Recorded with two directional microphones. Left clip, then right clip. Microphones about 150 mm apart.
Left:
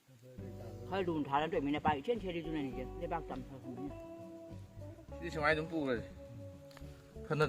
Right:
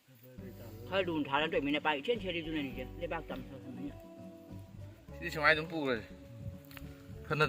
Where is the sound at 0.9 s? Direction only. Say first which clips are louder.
Right 3 dB; 65° left (ahead or behind).